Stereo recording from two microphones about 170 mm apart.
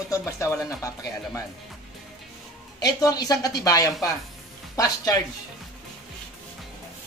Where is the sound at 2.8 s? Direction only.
20° left (ahead or behind).